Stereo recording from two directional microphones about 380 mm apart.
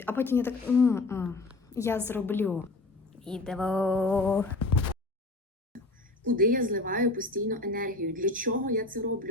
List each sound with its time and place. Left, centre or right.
0.0 s a woman's voice: centre
6.2 s a woman's voice: right